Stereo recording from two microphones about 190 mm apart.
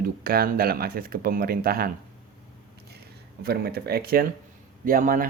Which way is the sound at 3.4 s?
55° right (ahead or behind).